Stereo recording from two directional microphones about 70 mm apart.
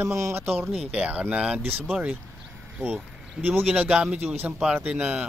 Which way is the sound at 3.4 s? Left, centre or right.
Right.